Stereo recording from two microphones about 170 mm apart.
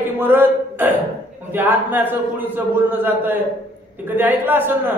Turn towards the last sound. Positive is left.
turn(degrees=-10)  # may be behind; listen again after turning